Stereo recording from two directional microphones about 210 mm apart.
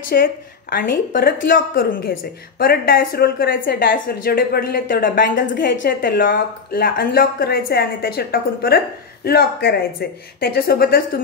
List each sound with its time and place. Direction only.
0.1 s speech: 45° left (ahead or behind)
5.7 s a woman's voice: 60° left (ahead or behind)
6.0 s speech: 40° left (ahead or behind)